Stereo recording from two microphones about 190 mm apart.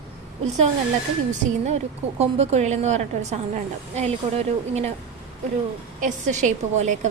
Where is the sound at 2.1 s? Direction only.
35° right (ahead or behind).